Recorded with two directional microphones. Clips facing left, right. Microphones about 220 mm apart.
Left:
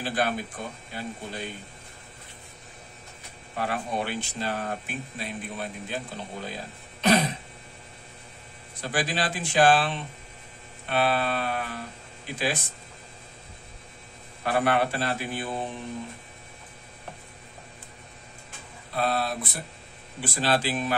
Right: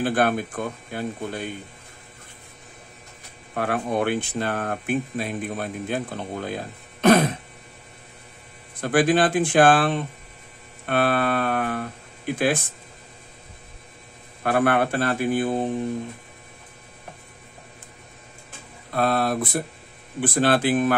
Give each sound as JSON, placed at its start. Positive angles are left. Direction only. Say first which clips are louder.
{"t": 0.0, "sound": "speech", "louder": "right 6 dB", "side_deg": -55}
{"t": 3.5, "sound": "speech", "louder": "right 6 dB", "side_deg": -55}
{"t": 8.8, "sound": "speech", "louder": "right 10 dB", "side_deg": -55}
{"t": 14.4, "sound": "speech", "louder": "right 4 dB", "side_deg": -50}
{"t": 18.9, "sound": "speech", "louder": "right 5 dB", "side_deg": -55}